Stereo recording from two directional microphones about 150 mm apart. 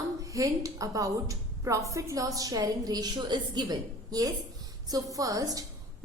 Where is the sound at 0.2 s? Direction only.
20° right (ahead or behind).